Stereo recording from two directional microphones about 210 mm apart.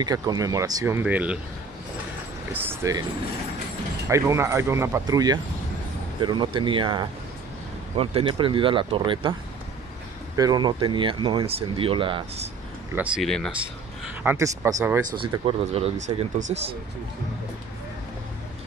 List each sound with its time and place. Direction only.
0.0 s speech: 20° right (ahead or behind)
2.5 s speech: 10° right (ahead or behind)
4.1 s speech: 15° right (ahead or behind)
10.3 s speech: 20° right (ahead or behind)
12.9 s speech: 5° right (ahead or behind)
14.2 s speech: 15° right (ahead or behind)
15.1 s speech: 25° right (ahead or behind)